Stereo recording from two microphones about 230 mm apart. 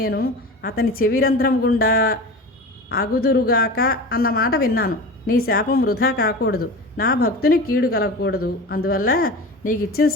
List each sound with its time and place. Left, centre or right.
0.0 s a woman's voice: left